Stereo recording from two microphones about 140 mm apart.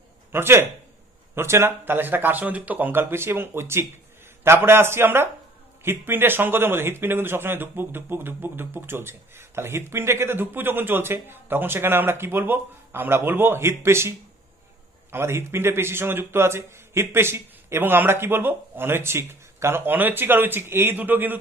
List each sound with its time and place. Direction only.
0.3 s a man's voice: 15° right (ahead or behind)